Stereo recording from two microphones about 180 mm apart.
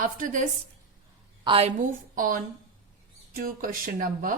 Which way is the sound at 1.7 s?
45° right (ahead or behind).